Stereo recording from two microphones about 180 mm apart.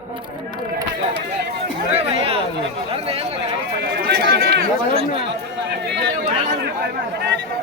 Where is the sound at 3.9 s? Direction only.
70° right (ahead or behind).